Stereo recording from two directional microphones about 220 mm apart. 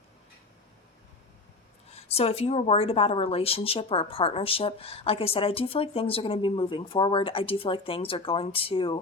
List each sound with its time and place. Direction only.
1.9 s speech: 25° left (ahead or behind)